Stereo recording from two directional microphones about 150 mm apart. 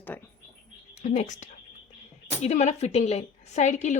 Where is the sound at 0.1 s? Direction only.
10° left (ahead or behind).